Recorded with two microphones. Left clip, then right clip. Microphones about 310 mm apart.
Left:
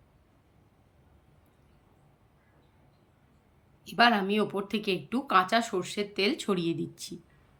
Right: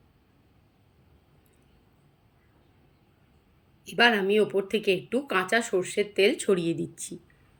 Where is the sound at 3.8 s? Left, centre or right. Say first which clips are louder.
Right 1 dB; left.